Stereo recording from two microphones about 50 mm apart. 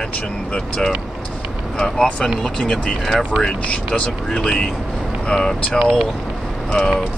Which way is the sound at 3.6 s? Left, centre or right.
Left.